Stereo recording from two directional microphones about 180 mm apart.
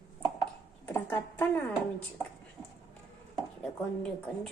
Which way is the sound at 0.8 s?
10° left (ahead or behind).